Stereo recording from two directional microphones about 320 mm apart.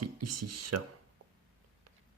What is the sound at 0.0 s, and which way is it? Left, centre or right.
Speech, right.